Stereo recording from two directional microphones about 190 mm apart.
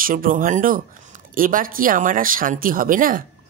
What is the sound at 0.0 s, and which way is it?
Speech, 45° right (ahead or behind).